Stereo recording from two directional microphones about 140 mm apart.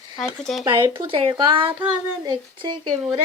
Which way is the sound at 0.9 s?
40° right (ahead or behind).